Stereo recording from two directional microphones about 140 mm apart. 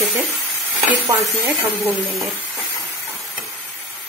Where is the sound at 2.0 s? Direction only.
Centre (ahead or behind).